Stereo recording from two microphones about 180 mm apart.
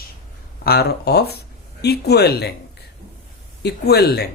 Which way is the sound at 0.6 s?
60° left (ahead or behind).